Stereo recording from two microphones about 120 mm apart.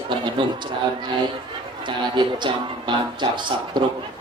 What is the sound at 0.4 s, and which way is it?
Speech, 45° right (ahead or behind).